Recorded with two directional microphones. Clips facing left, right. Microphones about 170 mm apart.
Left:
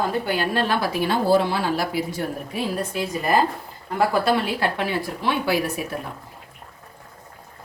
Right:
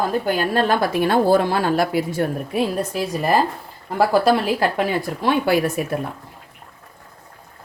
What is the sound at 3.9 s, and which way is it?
Speech, 35° right (ahead or behind).